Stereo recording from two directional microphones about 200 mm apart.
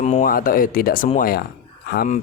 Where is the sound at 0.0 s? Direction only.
35° left (ahead or behind).